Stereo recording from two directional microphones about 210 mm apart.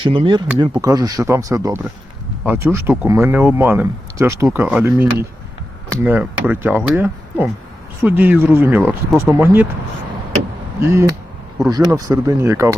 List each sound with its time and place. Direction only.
0.0 s speech: 25° right (ahead or behind)
10.8 s speech: 15° right (ahead or behind)